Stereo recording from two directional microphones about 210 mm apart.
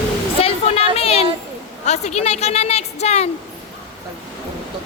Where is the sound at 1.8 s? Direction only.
35° left (ahead or behind).